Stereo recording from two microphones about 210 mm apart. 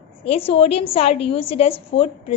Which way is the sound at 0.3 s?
25° left (ahead or behind).